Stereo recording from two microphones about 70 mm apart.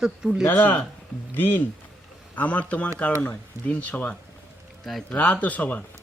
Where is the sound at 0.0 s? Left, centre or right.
Centre.